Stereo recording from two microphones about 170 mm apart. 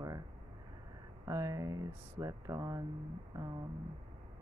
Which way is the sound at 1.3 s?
20° right (ahead or behind).